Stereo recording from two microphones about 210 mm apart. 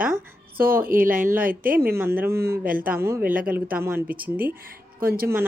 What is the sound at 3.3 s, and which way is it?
Speech, 40° right (ahead or behind).